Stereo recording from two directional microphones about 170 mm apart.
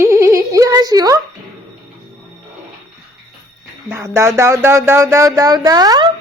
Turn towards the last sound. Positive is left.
turn(degrees=-25)  # may be behind; listen again after turning